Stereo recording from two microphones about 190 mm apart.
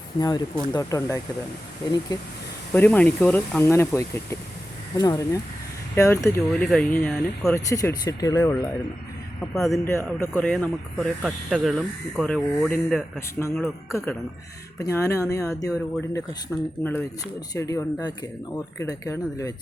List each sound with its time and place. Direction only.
0.2 s speech: 20° left (ahead or behind)
2.7 s speech: 10° left (ahead or behind)
6.2 s speech: centre (ahead or behind)
9.6 s speech: centre (ahead or behind); by 15.7 s 15° left (ahead or behind)
16.5 s speech: 5° left (ahead or behind)